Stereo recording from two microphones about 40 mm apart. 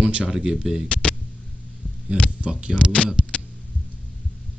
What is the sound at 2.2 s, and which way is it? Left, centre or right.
Speech, right.